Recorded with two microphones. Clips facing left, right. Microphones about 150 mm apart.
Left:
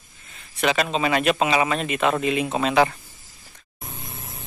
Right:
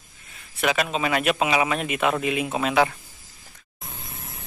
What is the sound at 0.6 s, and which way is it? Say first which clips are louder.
Speech: left 2 dB; 5° right (ahead or behind).